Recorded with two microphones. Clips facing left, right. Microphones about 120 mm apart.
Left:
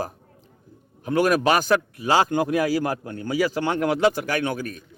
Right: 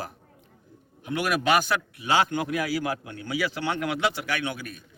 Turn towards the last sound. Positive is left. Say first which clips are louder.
# left 6 dB
turn(degrees=40)  # may be behind; listen again after turning